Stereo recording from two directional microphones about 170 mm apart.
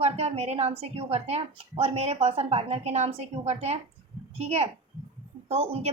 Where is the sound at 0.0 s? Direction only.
35° right (ahead or behind).